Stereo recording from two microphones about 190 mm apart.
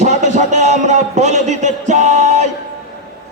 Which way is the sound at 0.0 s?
40° right (ahead or behind).